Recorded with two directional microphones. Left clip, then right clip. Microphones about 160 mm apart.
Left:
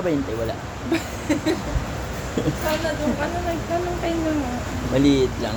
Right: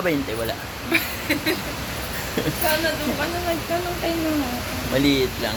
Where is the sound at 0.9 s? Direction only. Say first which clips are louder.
Right 2 dB; 35° left (ahead or behind).